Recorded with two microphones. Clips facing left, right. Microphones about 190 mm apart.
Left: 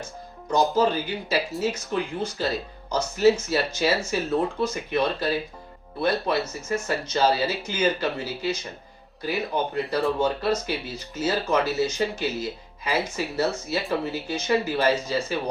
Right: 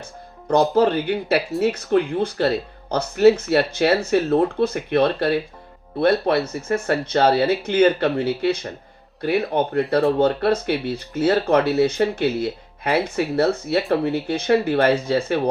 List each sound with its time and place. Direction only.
0.4 s speech: 60° right (ahead or behind)